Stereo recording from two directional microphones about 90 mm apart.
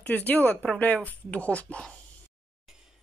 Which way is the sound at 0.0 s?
20° left (ahead or behind).